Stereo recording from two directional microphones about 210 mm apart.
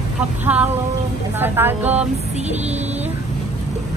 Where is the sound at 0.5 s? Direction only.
5° right (ahead or behind).